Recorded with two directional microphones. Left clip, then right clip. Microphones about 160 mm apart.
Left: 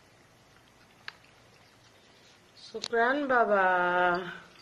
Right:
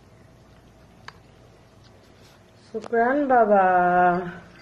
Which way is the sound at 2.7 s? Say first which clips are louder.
Right 6 dB; 25° left (ahead or behind).